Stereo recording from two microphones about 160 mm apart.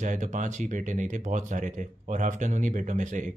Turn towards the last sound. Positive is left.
turn(degrees=-50)  # may be behind; listen again after turning